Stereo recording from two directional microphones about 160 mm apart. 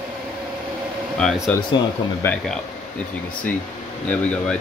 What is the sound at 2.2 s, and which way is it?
Speech, 10° left (ahead or behind).